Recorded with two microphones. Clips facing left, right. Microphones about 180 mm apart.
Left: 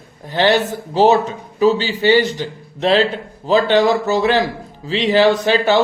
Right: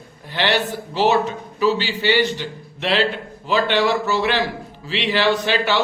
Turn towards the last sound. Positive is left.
turn(degrees=40)  # may be behind; listen again after turning